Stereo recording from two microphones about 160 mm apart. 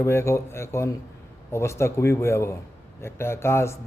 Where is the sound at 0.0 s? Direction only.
15° left (ahead or behind).